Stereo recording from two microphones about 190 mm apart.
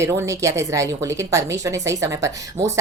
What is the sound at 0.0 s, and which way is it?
Speech, 15° right (ahead or behind).